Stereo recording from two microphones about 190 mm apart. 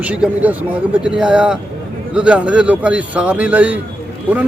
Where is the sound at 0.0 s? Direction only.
5° right (ahead or behind).